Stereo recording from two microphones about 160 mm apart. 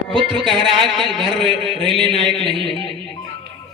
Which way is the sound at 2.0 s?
30° right (ahead or behind).